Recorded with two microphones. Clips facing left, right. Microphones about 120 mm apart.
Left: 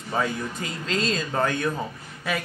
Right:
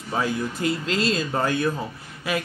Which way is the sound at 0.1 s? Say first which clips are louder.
Right 1 dB; 5° right (ahead or behind).